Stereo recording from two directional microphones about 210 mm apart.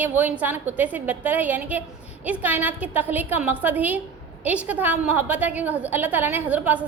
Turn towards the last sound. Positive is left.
turn(degrees=-5)  # may be behind; listen again after turning